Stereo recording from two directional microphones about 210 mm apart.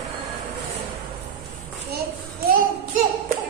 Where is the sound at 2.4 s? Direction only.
45° right (ahead or behind).